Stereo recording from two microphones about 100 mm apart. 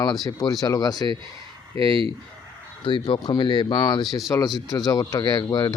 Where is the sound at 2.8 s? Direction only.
55° left (ahead or behind).